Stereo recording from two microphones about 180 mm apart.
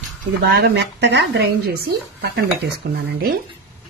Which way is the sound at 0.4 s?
65° right (ahead or behind).